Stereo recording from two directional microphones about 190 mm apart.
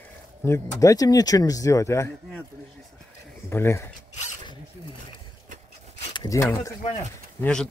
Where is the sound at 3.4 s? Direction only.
15° left (ahead or behind).